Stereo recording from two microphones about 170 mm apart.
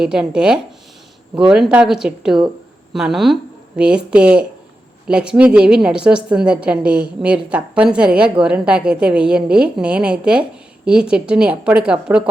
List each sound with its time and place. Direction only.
0.0 s a woman's voice: 5° right (ahead or behind)